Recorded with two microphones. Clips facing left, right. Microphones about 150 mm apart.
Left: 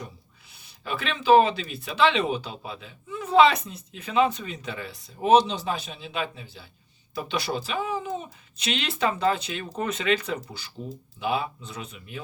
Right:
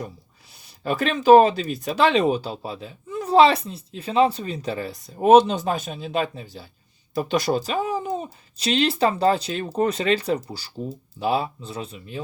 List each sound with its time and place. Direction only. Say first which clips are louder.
0.9 s speech: right 6 dB; 40° right (ahead or behind)